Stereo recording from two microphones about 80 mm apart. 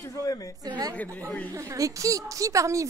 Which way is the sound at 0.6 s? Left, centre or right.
Right.